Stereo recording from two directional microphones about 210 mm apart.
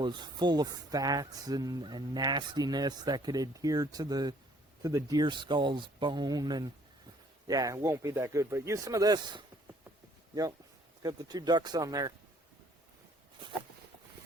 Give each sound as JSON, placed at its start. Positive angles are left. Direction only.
{"t": 0.0, "sound": "speech", "side_deg": -20}
{"t": 11.0, "sound": "speech", "side_deg": -20}